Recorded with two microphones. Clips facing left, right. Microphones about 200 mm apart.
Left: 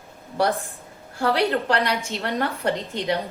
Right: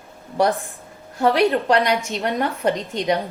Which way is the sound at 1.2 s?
15° right (ahead or behind).